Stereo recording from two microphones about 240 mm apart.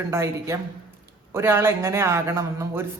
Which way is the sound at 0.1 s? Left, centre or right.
Centre.